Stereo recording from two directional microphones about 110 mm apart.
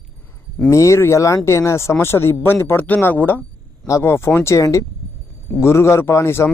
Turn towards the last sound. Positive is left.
turn(degrees=25)  # may be behind; listen again after turning